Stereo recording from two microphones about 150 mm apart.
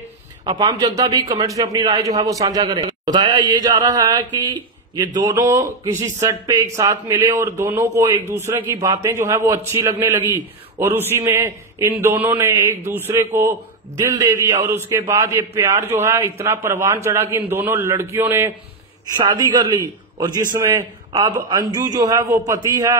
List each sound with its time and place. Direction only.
0.5 s a man's voice: 30° right (ahead or behind)
5.1 s a man's voice: 25° right (ahead or behind)